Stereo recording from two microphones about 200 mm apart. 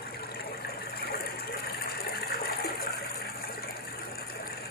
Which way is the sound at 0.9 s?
50° left (ahead or behind).